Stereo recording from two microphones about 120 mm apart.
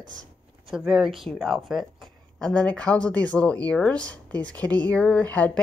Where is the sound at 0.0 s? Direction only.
90° right.